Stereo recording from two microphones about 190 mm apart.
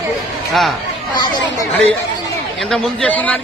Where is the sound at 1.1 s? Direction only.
20° left (ahead or behind).